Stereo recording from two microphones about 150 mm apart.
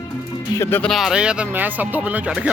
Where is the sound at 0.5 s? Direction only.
15° left (ahead or behind).